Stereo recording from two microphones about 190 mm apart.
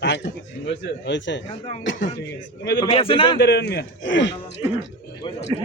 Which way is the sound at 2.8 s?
30° left (ahead or behind).